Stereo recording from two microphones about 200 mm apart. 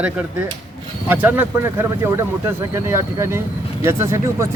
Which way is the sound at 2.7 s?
15° right (ahead or behind).